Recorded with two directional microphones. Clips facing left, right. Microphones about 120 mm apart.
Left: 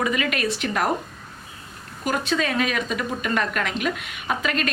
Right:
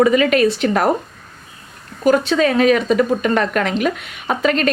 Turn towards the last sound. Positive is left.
turn(degrees=-35)  # may be behind; listen again after turning